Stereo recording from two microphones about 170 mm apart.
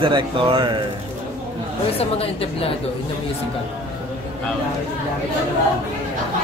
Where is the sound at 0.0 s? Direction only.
30° right (ahead or behind).